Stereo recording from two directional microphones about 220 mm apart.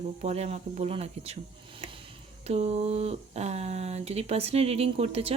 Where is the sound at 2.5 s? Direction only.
30° right (ahead or behind).